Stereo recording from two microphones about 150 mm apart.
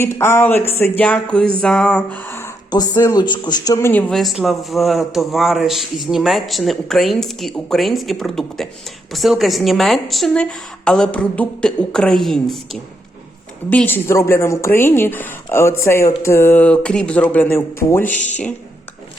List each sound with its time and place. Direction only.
0.0 s a woman's voice: 15° left (ahead or behind)
2.6 s speech: 25° left (ahead or behind)
4.1 s a man's voice: centre (ahead or behind)
13.7 s a woman's voice: 10° left (ahead or behind)